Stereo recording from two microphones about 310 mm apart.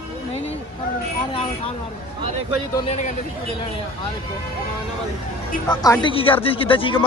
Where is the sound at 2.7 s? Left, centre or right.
Left.